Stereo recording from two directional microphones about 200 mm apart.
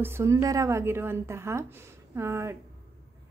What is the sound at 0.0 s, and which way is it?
A woman's voice, 15° right (ahead or behind).